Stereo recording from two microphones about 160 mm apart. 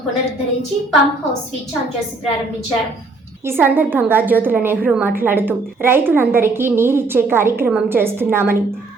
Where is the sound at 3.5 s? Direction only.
15° right (ahead or behind).